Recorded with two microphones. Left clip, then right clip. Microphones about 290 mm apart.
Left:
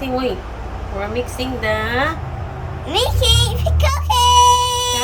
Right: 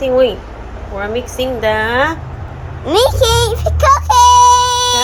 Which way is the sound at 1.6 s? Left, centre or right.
Centre.